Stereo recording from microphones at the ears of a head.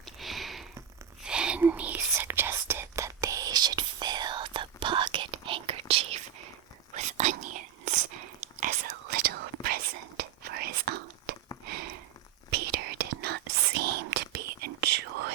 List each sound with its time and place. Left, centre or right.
1.3 s whispering: right
11.6 s a sound: right
12.5 s whispering: right